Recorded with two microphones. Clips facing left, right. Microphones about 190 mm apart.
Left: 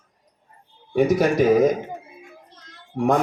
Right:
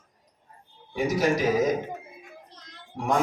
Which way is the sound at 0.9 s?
55° left (ahead or behind).